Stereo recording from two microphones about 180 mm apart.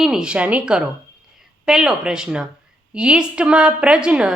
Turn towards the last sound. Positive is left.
turn(degrees=-5)  # may be behind; listen again after turning